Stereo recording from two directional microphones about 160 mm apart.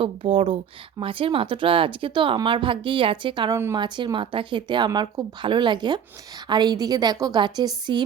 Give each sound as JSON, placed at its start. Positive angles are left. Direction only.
{"t": 0.0, "sound": "speech", "side_deg": -35}
{"t": 3.5, "sound": "speech", "side_deg": -20}
{"t": 3.8, "sound": "speech", "side_deg": -30}